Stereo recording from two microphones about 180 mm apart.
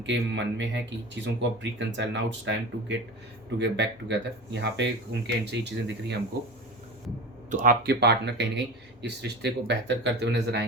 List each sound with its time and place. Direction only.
0.0 s speech: 85° right
7.5 s speech: 50° right (ahead or behind)
7.9 s speech: 70° right (ahead or behind)